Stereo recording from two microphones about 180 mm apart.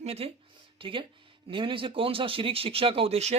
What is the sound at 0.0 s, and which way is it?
Speech, 35° right (ahead or behind).